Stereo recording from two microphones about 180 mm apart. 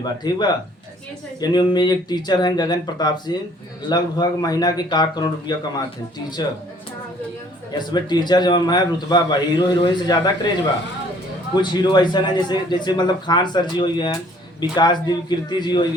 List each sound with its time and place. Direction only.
0.0 s a man's voice: 25° left (ahead or behind)
7.7 s a man's voice: 25° left (ahead or behind)
11.6 s a man's voice: 25° left (ahead or behind)